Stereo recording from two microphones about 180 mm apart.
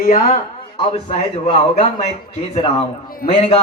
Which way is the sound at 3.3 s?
35° left (ahead or behind).